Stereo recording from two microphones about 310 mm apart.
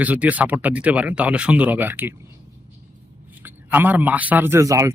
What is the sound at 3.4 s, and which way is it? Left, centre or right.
A man's voice, centre.